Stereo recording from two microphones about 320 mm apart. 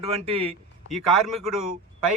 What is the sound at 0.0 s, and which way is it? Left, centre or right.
Speech, centre.